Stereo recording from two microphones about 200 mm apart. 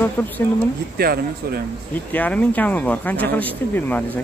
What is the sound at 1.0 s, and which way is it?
Speech, 50° right (ahead or behind).